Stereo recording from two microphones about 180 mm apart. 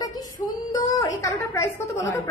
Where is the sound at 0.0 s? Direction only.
20° left (ahead or behind).